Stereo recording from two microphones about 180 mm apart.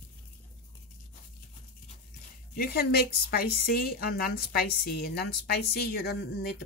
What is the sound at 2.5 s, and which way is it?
A woman's voice, 55° left (ahead or behind).